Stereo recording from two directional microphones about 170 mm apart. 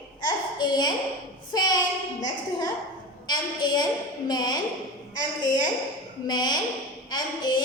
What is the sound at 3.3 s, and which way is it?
A woman's voice, 25° left (ahead or behind).